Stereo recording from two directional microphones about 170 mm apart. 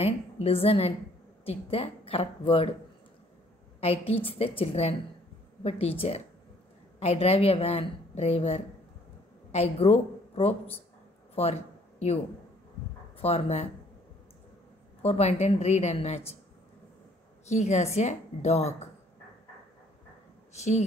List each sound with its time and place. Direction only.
0.0 s speech: 35° left (ahead or behind)
3.8 s speech: 35° left (ahead or behind)
11.3 s a sound: 40° left (ahead or behind)
13.2 s speech: 35° left (ahead or behind)
15.0 s speech: 40° left (ahead or behind)
17.5 s speech: 40° left (ahead or behind)
20.5 s speech: 45° left (ahead or behind)